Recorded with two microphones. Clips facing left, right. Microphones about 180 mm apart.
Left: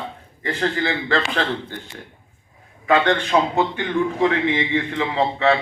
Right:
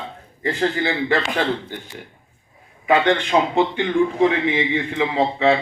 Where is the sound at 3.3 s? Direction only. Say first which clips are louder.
Right 1 dB; 25° right (ahead or behind).